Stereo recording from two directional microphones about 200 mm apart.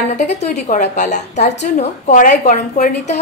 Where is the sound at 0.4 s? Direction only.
35° left (ahead or behind).